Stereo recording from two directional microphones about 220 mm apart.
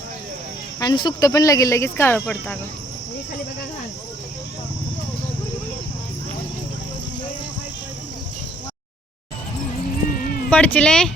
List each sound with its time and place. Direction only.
0.8 s speech: 20° left (ahead or behind)
10.2 s a sound: 40° left (ahead or behind)
10.5 s speech: 5° left (ahead or behind)